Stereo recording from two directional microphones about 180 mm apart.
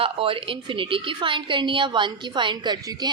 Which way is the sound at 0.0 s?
30° right (ahead or behind).